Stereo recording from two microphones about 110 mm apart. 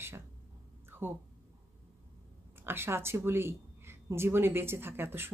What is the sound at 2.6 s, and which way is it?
Speech, 20° right (ahead or behind).